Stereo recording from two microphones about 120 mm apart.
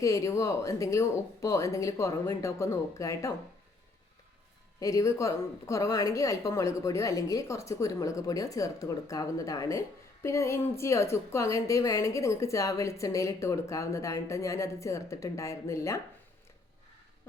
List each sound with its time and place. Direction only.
0.0 s a woman's voice: 25° left (ahead or behind)
4.8 s a woman's voice: 25° left (ahead or behind)